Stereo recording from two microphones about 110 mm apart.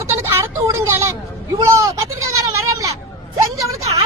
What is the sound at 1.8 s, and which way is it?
Goat, 30° right (ahead or behind).